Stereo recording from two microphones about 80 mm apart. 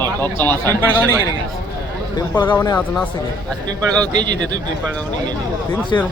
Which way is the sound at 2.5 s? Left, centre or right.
Left.